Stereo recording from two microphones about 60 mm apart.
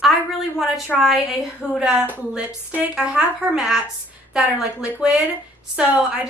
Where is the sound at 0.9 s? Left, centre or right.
Centre.